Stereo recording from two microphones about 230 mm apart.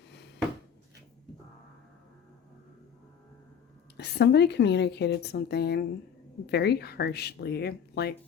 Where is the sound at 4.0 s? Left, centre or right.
Left.